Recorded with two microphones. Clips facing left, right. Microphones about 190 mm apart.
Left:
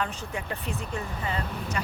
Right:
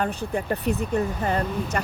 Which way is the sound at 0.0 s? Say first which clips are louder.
Right 6 dB; 50° right (ahead or behind).